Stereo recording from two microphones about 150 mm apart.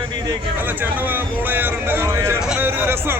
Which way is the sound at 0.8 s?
15° right (ahead or behind).